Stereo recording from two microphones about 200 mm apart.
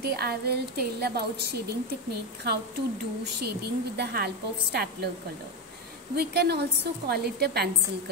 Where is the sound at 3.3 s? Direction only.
55° right (ahead or behind).